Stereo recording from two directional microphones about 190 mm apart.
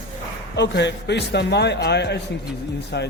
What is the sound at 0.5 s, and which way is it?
A man's voice, 65° left (ahead or behind).